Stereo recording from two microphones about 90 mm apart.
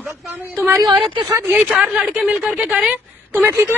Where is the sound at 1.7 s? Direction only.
10° right (ahead or behind).